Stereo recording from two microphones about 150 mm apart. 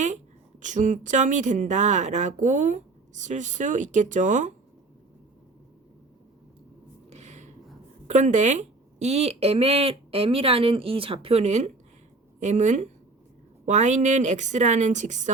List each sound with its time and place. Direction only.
0.6 s speech: 55° right (ahead or behind)
7.1 s a sound: 50° right (ahead or behind)
8.0 s a woman's voice: 50° right (ahead or behind)